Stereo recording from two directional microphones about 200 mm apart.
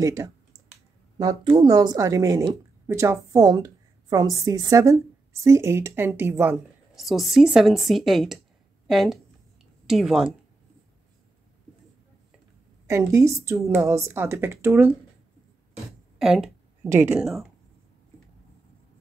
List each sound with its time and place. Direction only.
0.0 s a woman's voice: 15° right (ahead or behind)
7.0 s a woman's voice: centre (ahead or behind)
12.8 s a woman's voice: 15° right (ahead or behind)
15.7 s a sound: centre (ahead or behind)
17.0 s a woman's voice: 10° right (ahead or behind)